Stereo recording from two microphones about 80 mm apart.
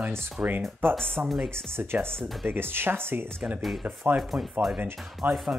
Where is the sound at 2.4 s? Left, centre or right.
Right.